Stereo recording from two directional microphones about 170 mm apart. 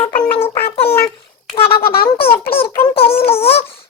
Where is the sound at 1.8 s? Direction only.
65° left (ahead or behind).